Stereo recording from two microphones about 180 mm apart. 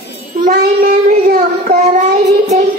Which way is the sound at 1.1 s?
50° right (ahead or behind).